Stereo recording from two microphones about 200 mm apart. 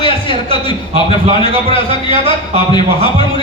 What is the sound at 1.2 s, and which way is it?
A man's voice, 30° right (ahead or behind).